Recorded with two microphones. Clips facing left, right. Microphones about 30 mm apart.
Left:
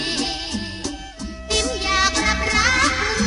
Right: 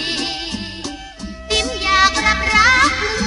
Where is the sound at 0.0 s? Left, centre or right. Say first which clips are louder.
Right 2 dB; right.